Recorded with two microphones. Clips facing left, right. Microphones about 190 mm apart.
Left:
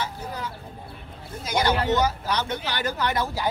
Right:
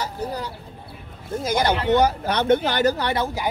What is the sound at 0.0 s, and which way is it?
Vehicle, 35° right (ahead or behind).